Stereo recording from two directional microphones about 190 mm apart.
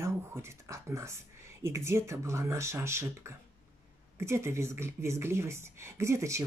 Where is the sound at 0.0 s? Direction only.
15° right (ahead or behind).